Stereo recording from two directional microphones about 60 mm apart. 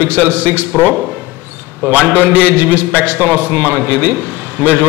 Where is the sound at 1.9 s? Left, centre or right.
Right.